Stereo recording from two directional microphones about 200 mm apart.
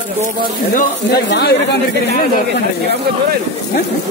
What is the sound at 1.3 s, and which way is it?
Speech, 55° left (ahead or behind).